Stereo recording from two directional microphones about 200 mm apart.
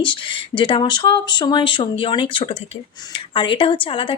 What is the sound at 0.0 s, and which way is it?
A woman's voice, 25° left (ahead or behind).